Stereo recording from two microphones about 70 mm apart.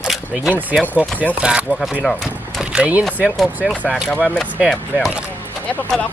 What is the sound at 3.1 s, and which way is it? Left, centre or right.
Speech, left.